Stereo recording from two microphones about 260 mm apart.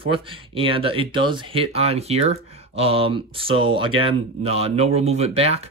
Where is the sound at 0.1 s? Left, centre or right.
Centre.